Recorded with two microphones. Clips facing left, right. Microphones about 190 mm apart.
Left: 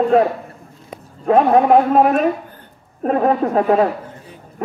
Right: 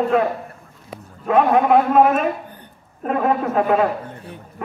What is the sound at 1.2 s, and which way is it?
Speech, 35° left (ahead or behind).